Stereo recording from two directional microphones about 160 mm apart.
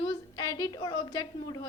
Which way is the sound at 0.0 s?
25° left (ahead or behind).